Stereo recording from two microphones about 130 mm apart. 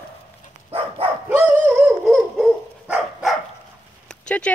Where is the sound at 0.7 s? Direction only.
50° right (ahead or behind).